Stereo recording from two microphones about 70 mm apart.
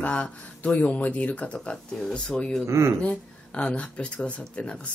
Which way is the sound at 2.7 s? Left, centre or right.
Right.